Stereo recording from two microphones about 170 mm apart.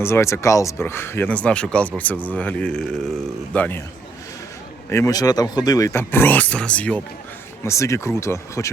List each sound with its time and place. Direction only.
0.0 s speech: 15° left (ahead or behind)
4.9 s speech: 15° left (ahead or behind)